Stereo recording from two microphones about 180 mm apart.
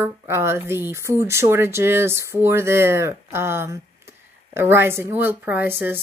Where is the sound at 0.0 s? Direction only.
15° right (ahead or behind).